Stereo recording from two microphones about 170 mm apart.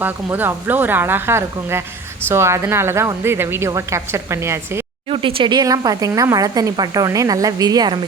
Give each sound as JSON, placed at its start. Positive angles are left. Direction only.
{"t": 0.0, "sound": "a woman's voice", "side_deg": -10}
{"t": 5.0, "sound": "speech", "side_deg": -30}